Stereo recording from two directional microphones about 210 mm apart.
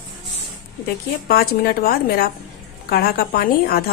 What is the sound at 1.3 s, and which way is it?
Speech, 45° left (ahead or behind).